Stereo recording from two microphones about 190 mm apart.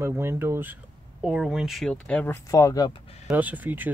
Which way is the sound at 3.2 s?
10° right (ahead or behind).